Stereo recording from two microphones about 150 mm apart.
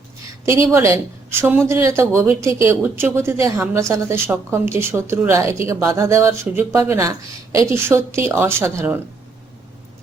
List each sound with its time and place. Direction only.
0.4 s a woman's voice: 20° right (ahead or behind)